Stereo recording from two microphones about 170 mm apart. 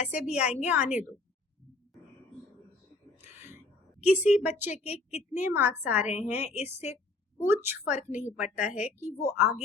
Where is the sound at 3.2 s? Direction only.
15° right (ahead or behind).